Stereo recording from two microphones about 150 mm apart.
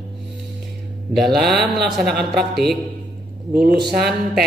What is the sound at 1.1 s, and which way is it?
A man's voice, centre (ahead or behind).